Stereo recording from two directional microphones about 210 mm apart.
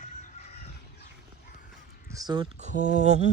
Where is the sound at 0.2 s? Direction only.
30° left (ahead or behind).